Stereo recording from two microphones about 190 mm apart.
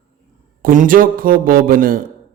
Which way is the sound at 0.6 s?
45° right (ahead or behind).